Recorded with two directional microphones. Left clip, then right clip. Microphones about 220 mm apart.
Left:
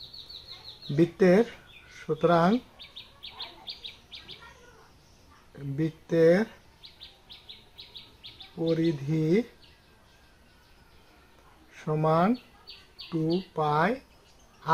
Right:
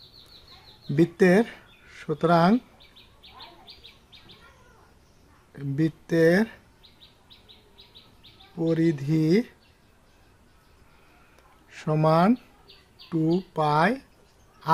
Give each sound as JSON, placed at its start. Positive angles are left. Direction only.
{"t": 0.9, "sound": "speech", "side_deg": -35}
{"t": 5.5, "sound": "speech", "side_deg": -35}
{"t": 8.5, "sound": "speech", "side_deg": -35}
{"t": 11.7, "sound": "speech", "side_deg": -40}